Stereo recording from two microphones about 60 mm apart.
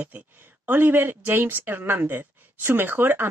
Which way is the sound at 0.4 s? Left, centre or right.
Right.